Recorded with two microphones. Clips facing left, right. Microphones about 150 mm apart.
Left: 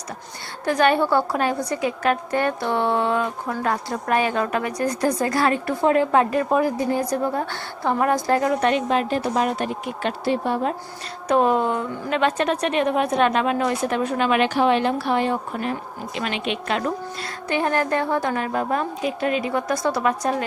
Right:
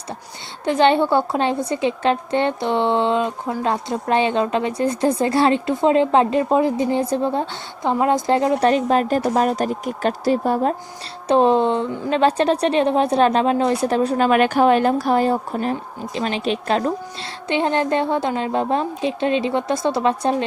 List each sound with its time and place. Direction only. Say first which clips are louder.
0.6 s a woman's voice: right 3 dB; 25° right (ahead or behind)
8.7 s a woman's voice: right 4 dB; 40° right (ahead or behind)
11.3 s a woman's voice: right 3 dB; 30° right (ahead or behind)
17.5 s a woman's voice: right 3 dB; 25° right (ahead or behind)